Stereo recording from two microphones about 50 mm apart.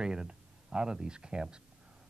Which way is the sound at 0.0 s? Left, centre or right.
Centre.